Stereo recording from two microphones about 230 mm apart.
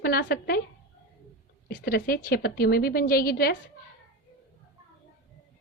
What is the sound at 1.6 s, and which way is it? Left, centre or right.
A woman's voice, left.